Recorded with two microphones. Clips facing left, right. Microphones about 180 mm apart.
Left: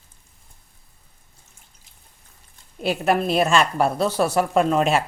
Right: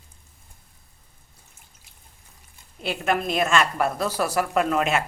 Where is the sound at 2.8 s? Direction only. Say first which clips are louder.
Left 4 dB; 40° left (ahead or behind).